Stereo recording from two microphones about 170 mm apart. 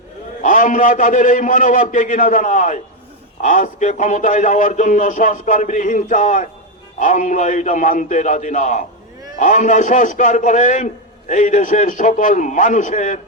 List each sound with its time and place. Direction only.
0.4 s a man's voice: 50° left (ahead or behind)